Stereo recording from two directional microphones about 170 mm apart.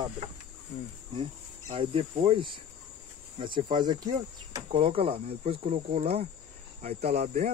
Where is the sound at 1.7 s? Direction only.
30° right (ahead or behind).